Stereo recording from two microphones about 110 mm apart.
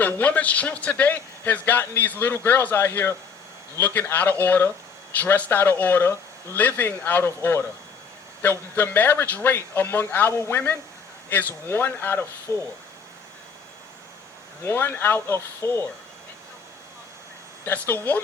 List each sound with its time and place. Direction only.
0.0 s a man's voice: 15° left (ahead or behind)
14.6 s speech: 20° left (ahead or behind)
17.7 s speech: 20° left (ahead or behind)